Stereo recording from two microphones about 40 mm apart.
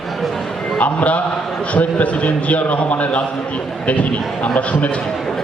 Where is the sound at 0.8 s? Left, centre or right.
Left.